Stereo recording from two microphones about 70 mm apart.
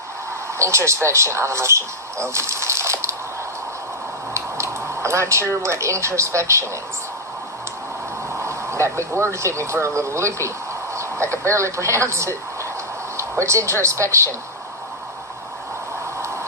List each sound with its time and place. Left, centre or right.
0.6 s a woman's voice: right
4.4 s speech: right
8.4 s a woman's voice: right
16.2 s a sound: right